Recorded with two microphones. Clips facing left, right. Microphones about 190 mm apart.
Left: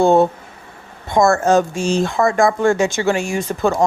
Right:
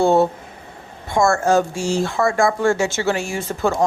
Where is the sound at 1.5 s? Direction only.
20° left (ahead or behind).